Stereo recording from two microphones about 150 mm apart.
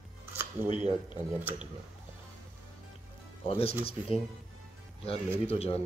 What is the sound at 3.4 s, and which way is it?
Speech, 40° left (ahead or behind).